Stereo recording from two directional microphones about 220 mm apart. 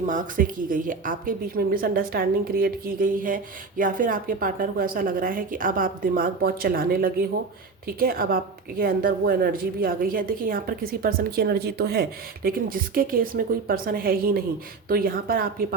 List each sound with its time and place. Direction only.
0.0 s a woman's voice: 35° right (ahead or behind)